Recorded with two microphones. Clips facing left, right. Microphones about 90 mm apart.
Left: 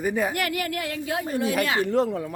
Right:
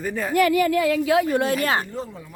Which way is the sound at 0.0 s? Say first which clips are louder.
Left 2 dB; 10° left (ahead or behind).